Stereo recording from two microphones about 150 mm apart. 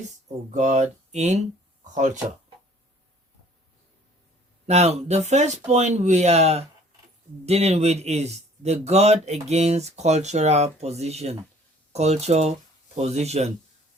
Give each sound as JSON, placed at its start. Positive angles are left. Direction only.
{"t": 0.5, "sound": "speech", "side_deg": -55}
{"t": 4.6, "sound": "speech", "side_deg": -45}